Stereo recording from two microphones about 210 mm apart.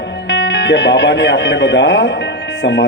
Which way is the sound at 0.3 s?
55° left (ahead or behind).